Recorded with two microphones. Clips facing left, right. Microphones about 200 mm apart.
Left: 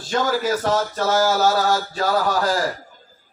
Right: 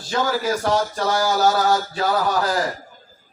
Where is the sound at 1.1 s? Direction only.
Centre (ahead or behind).